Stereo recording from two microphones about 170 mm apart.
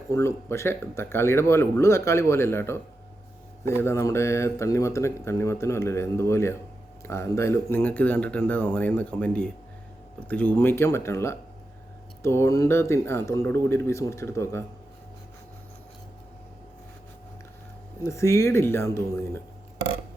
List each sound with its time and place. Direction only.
0.1 s speech: 15° left (ahead or behind)
18.0 s speech: 15° left (ahead or behind)